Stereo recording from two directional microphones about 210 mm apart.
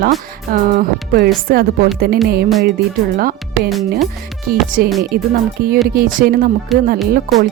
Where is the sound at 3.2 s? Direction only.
45° right (ahead or behind).